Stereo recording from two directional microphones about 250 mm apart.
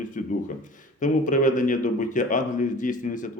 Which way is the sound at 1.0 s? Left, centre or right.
Left.